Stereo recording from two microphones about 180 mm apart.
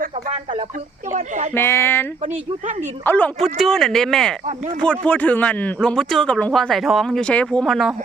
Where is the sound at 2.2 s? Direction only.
40° right (ahead or behind).